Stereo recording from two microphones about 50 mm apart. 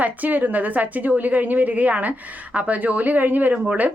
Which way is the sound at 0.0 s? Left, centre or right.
Right.